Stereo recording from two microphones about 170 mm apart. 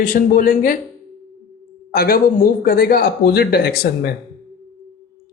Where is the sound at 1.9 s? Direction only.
60° left (ahead or behind).